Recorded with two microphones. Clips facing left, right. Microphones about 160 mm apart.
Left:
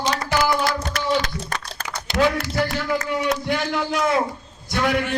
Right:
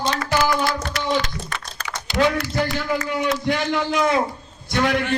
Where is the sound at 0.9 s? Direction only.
50° left (ahead or behind).